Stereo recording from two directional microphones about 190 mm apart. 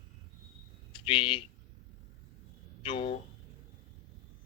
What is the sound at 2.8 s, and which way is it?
Speech, 30° left (ahead or behind).